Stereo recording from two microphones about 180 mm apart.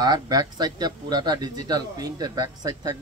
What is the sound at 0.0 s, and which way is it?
Speech, 20° right (ahead or behind).